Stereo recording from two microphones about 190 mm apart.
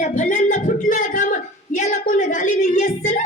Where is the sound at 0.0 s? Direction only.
40° left (ahead or behind).